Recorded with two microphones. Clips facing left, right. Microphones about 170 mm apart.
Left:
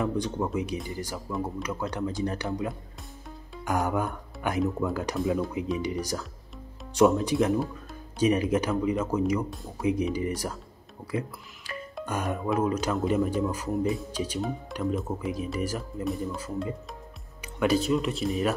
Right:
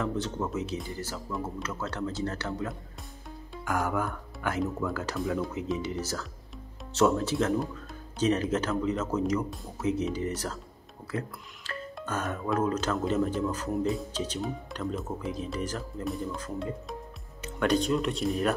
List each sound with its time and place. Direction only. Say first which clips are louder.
0.0 s speech: left 3 dB; 15° left (ahead or behind)